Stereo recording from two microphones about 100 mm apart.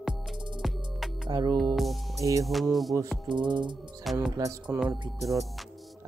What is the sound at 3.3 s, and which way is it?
Music, 50° right (ahead or behind).